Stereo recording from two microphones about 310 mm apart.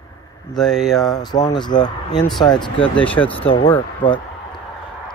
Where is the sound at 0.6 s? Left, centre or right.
Centre.